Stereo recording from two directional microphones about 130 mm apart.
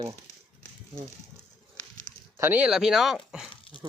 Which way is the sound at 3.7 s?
40° left (ahead or behind).